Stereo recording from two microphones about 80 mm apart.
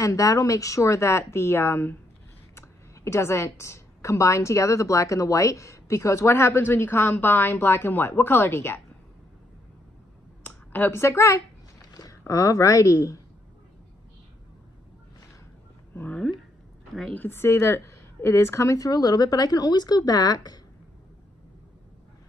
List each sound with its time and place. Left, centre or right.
0.0 s a woman's voice: left
10.4 s speech: left
11.8 s a sound: left
12.2 s a woman's voice: left
15.9 s a woman's voice: left